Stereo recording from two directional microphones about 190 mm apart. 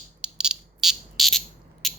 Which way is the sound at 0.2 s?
5° right (ahead or behind).